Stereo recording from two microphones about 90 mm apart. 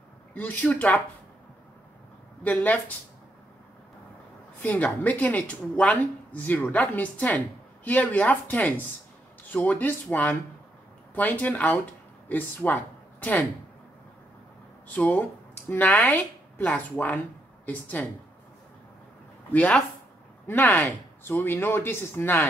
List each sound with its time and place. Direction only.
0.3 s a woman's voice: 20° left (ahead or behind)
2.4 s a man's voice: 20° left (ahead or behind)
4.6 s a woman's voice: 20° left (ahead or behind)
15.0 s a woman's voice: 15° left (ahead or behind)
19.5 s a woman's voice: 15° left (ahead or behind)